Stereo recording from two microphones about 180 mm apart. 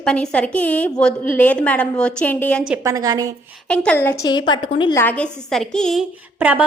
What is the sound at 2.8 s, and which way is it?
Speech, 20° right (ahead or behind).